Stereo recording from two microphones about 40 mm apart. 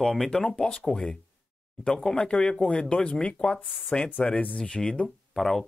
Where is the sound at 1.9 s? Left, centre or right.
Centre.